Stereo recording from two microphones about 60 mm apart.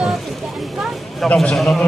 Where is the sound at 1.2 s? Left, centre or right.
Centre.